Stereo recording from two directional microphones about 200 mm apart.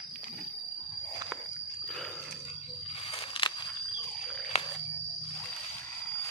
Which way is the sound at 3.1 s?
25° left (ahead or behind).